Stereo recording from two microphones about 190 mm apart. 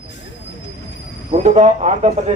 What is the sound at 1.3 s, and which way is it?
Speech, 35° right (ahead or behind).